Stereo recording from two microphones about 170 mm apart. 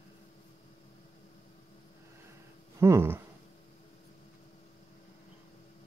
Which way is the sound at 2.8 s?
15° right (ahead or behind).